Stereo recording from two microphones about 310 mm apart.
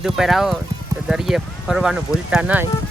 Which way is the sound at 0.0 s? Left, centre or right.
Centre.